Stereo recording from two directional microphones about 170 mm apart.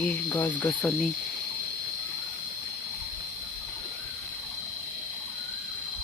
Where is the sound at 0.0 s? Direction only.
10° left (ahead or behind).